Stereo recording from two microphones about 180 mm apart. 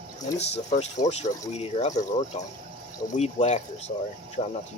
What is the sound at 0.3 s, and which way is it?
Speech, 40° left (ahead or behind).